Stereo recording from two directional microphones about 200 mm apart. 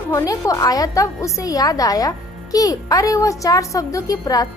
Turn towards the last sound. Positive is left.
turn(degrees=15)  # may be behind; listen again after turning